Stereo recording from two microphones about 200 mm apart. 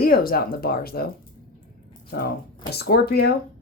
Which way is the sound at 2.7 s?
50° left (ahead or behind).